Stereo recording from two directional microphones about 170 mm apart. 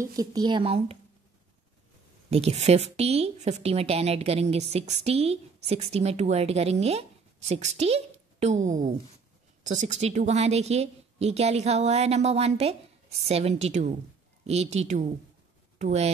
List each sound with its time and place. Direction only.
0.0 s speech: 20° right (ahead or behind); by 0.9 s 35° right (ahead or behind)
2.3 s a woman's voice: 40° right (ahead or behind)